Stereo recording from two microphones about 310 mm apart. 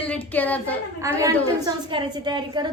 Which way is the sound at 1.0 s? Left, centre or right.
Centre.